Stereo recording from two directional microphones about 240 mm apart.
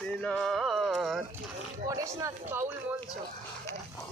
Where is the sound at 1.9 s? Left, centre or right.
Centre.